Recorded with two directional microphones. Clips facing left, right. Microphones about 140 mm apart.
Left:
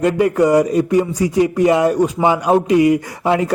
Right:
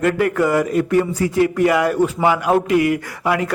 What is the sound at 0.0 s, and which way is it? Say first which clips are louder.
A man's voice: left 3 dB; 20° left (ahead or behind).